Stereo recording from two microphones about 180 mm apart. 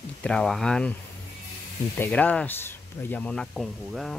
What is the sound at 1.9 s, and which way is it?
Speech, 10° left (ahead or behind).